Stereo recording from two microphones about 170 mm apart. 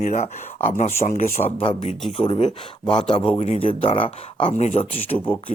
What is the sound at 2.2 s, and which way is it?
Speech, 30° left (ahead or behind).